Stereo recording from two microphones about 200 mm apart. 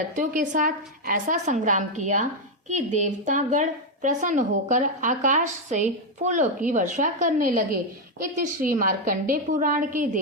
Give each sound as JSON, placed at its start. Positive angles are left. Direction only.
{"t": 0.2, "sound": "a woman's voice", "side_deg": -40}